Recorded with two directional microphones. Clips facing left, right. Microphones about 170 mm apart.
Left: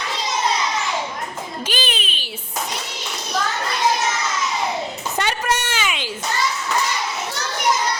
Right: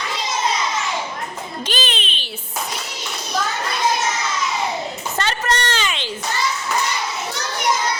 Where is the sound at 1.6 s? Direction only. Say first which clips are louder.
Right 1 dB; 10° left (ahead or behind).